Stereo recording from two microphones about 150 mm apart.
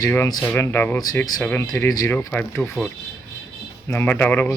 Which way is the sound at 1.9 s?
25° left (ahead or behind).